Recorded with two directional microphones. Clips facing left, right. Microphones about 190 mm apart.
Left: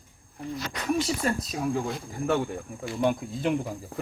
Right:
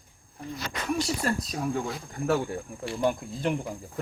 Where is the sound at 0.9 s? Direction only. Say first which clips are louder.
Even; centre (ahead or behind).